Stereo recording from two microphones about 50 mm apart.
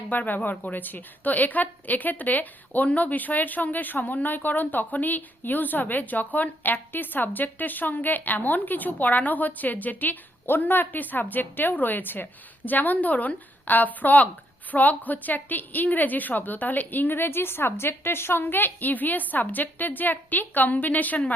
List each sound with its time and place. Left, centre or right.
0.1 s speech: left